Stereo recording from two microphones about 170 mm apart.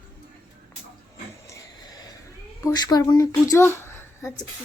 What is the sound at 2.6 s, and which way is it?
A woman's voice, 25° left (ahead or behind).